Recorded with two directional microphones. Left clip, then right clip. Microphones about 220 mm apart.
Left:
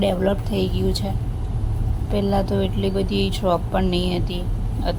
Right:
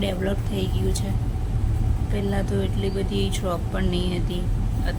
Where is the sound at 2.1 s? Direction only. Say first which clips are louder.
Left 6 dB; 15° left (ahead or behind).